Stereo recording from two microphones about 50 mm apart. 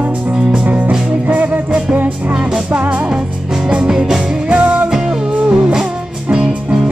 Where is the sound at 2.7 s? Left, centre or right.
Right.